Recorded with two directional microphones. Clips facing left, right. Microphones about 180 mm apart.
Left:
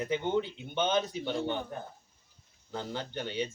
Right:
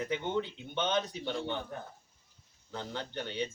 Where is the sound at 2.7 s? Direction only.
10° left (ahead or behind).